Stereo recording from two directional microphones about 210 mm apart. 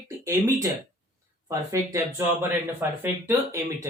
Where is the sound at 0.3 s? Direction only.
15° right (ahead or behind).